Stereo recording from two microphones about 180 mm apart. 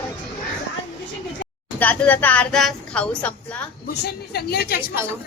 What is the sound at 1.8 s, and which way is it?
A woman's voice, 10° left (ahead or behind).